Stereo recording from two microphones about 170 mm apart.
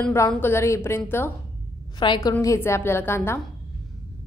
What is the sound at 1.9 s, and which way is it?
A woman's voice, 25° left (ahead or behind).